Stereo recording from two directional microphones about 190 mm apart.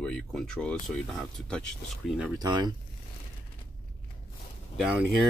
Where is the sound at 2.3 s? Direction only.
20° right (ahead or behind).